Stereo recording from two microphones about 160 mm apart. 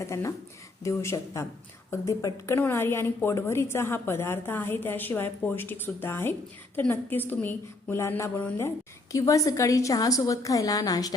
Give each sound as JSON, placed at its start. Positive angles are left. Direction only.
{"t": 0.0, "sound": "a woman's voice", "side_deg": 20}